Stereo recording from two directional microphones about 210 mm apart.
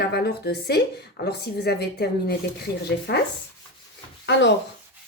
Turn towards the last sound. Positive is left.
turn(degrees=55)  # may be behind; listen again after turning